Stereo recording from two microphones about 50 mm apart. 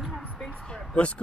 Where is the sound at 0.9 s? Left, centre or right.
Left.